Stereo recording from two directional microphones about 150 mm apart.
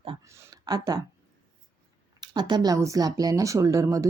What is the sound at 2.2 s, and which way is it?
Speech, 30° right (ahead or behind).